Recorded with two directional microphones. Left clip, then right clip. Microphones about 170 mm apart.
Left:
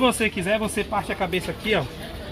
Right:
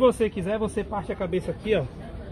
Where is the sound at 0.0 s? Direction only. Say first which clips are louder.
Even; 25° right (ahead or behind).